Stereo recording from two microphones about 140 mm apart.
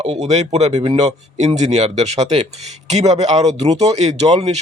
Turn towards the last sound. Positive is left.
turn(degrees=-50)  # may be behind; listen again after turning